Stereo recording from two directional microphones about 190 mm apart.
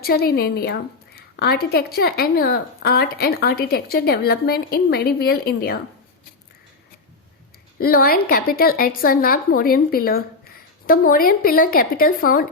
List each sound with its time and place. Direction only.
0.0 s a woman's voice: 55° left (ahead or behind)
7.8 s a woman's voice: 50° left (ahead or behind)